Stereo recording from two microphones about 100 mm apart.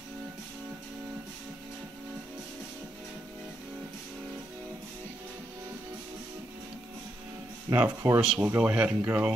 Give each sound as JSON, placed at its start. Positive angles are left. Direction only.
{"t": 7.7, "sound": "speech", "side_deg": -20}